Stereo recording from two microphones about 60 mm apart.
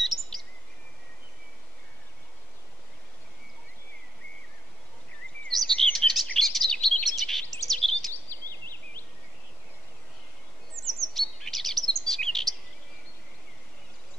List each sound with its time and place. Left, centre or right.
0.0 s bird vocalization: centre
5.5 s chirp: centre
8.1 s a sound: left
10.8 s chirp: centre